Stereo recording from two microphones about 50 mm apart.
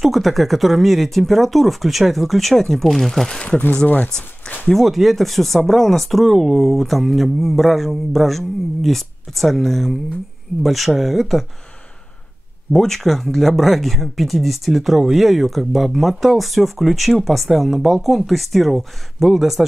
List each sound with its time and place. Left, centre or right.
0.0 s speech: centre
3.7 s speech: left
4.7 s speech: centre
12.7 s speech: centre